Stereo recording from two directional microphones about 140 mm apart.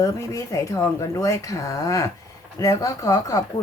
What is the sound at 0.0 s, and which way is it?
A woman's voice, 20° left (ahead or behind).